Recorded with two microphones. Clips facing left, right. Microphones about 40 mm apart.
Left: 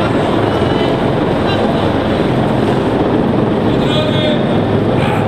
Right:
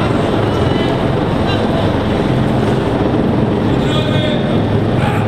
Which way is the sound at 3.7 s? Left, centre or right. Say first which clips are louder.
Left 2 dB; left.